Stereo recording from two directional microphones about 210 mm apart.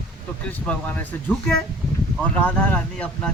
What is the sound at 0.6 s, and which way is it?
Speech, 5° left (ahead or behind).